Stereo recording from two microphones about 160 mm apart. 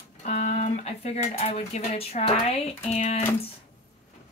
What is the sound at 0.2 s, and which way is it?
Speech, 45° left (ahead or behind).